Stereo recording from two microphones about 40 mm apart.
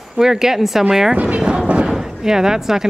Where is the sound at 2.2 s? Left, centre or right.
Centre.